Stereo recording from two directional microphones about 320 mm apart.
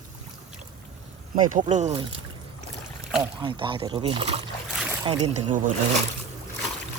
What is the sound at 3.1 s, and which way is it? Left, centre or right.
Speech, centre.